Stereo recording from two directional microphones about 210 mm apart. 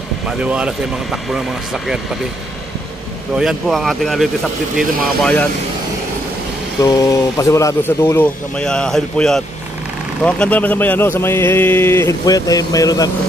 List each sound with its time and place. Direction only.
0.4 s speech: 5° right (ahead or behind)
3.3 s speech: centre (ahead or behind)
6.8 s speech: 15° left (ahead or behind)